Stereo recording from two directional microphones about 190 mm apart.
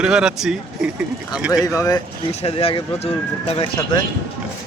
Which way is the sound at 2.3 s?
30° left (ahead or behind).